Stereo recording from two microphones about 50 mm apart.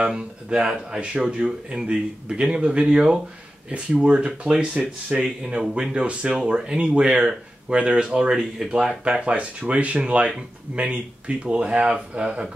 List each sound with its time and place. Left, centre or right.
0.0 s speech: centre
9.0 s speech: right